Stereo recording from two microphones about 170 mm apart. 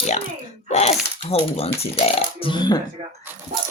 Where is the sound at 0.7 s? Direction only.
40° left (ahead or behind).